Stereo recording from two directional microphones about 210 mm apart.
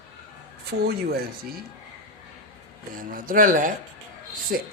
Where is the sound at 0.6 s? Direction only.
50° right (ahead or behind).